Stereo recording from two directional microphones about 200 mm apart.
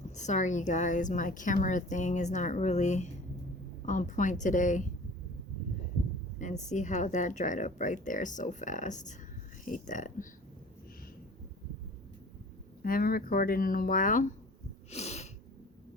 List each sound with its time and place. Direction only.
0.2 s a woman's voice: 35° left (ahead or behind)
6.4 s a woman's voice: 35° left (ahead or behind)
12.8 s speech: 45° left (ahead or behind)
14.8 s sneeze: 35° left (ahead or behind)